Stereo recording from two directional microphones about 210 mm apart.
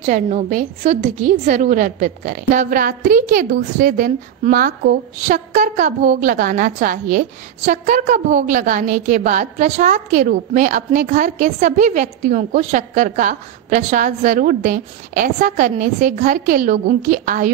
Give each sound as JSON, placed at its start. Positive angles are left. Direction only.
{"t": 0.0, "sound": "a woman's voice", "side_deg": -35}